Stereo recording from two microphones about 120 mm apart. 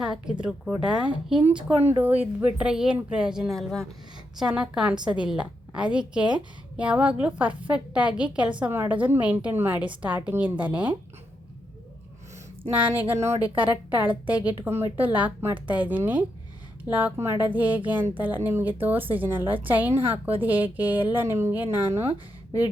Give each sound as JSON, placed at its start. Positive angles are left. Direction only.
{"t": 0.0, "sound": "a woman's voice", "side_deg": -5}
{"t": 12.7, "sound": "a woman's voice", "side_deg": -15}